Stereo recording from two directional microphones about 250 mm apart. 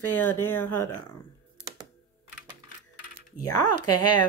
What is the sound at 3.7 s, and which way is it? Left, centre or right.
Speech, left.